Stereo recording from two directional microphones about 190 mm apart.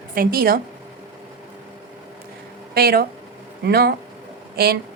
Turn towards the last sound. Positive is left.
turn(degrees=-55)  # may be behind; listen again after turning